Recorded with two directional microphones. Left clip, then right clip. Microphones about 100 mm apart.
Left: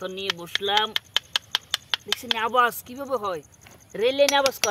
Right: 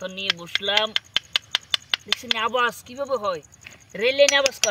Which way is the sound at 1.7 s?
35° left (ahead or behind).